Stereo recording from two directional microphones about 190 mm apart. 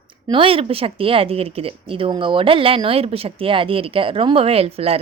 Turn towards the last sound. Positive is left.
turn(degrees=-30)  # may be behind; listen again after turning